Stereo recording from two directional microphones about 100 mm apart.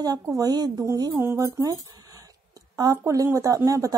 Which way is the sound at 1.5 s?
35° right (ahead or behind).